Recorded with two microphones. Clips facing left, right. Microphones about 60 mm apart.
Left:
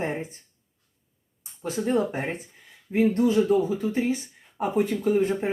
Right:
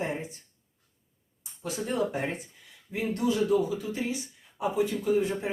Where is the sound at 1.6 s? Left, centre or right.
Left.